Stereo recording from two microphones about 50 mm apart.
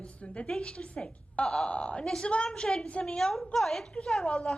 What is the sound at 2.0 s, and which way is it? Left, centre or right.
A woman's voice, centre.